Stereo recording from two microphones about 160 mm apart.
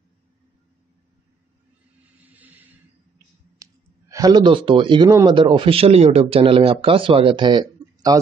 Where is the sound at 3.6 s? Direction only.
20° right (ahead or behind).